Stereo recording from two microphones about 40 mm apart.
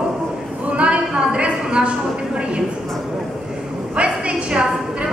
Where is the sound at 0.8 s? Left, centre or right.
Right.